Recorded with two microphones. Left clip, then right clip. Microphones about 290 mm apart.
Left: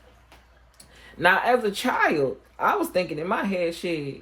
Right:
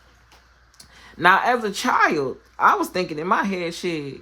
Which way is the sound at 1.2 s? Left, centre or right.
Centre.